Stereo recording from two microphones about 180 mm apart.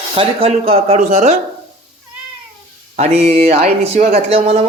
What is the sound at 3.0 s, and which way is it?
Speech, 35° right (ahead or behind).